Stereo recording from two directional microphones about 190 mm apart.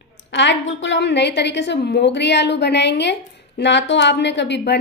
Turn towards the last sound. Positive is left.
turn(degrees=65)  # may be behind; listen again after turning